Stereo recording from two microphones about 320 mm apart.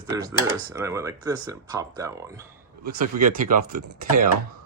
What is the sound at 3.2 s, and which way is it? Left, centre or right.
Speech, right.